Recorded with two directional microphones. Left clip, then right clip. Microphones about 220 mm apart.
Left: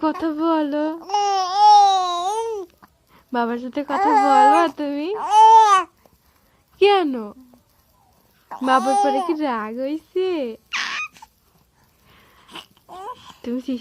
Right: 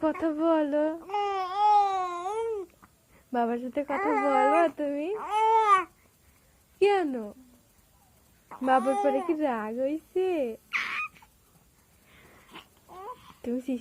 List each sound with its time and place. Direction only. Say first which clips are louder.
0.0 s baby cry: left 5 dB; 20° left (ahead or behind)
3.3 s speech: left 5 dB; 25° left (ahead or behind)
6.7 s speech: left 8 dB; 30° left (ahead or behind)
8.4 s a child's voice: left 7 dB; 20° left (ahead or behind)
12.0 s a sound: left 5 dB; 20° left (ahead or behind)